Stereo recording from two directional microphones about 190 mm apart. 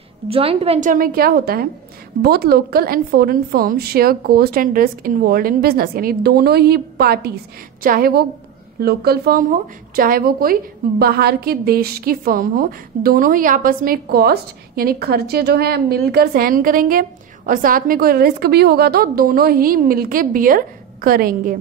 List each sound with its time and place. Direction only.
0.3 s a woman's voice: 30° right (ahead or behind); by 21.5 s 50° right (ahead or behind)